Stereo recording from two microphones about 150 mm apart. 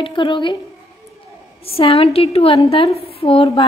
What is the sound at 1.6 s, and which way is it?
A woman's voice, 40° left (ahead or behind).